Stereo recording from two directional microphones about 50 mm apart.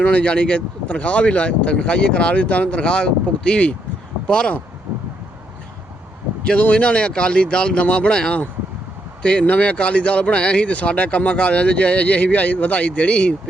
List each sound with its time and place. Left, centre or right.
0.0 s speech: left
6.6 s speech: left